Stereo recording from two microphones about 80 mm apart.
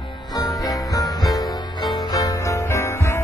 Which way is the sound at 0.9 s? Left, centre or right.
Left.